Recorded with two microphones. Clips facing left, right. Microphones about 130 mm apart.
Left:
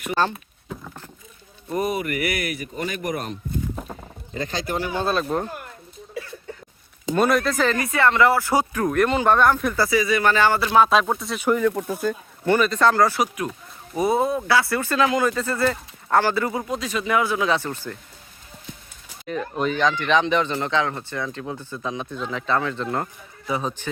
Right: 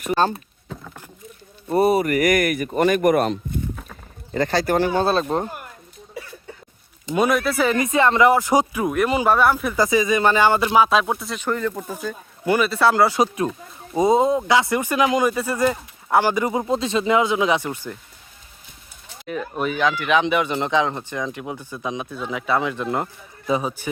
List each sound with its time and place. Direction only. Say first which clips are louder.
1.7 s speech: right 7 dB; 35° right (ahead or behind); by 3.3 s 65° right (ahead or behind)
4.6 s speech: right 6 dB; 45° right (ahead or behind)
4.9 s speech: right 3 dB; 35° right (ahead or behind)
7.1 s speech: even; 5° right (ahead or behind)
7.8 s speech: right 3 dB; 20° right (ahead or behind)
9.7 s speech: right 2 dB; 20° right (ahead or behind)
10.8 s speech: even; 5° right (ahead or behind)
11.3 s speech: left 7 dB; 10° left (ahead or behind)
11.9 s speech: left 5 dB; 5° right (ahead or behind)
13.2 s speech: right 5 dB; 30° right (ahead or behind)
19.3 s speech: even; 5° right (ahead or behind)